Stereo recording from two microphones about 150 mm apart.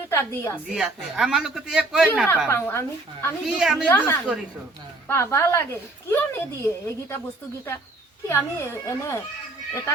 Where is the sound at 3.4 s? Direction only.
Centre (ahead or behind).